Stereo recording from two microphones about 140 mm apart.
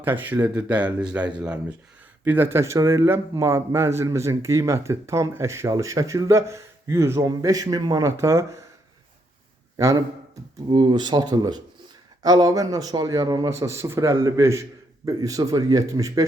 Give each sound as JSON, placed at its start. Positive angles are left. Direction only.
{"t": 0.0, "sound": "a man's voice", "side_deg": -15}
{"t": 9.7, "sound": "a man's voice", "side_deg": -20}
{"t": 10.7, "sound": "a man's voice", "side_deg": -35}